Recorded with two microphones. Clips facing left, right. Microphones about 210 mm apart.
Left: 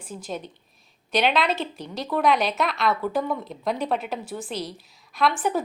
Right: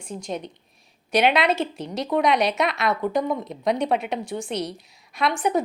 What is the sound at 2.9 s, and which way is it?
Speech, 15° right (ahead or behind).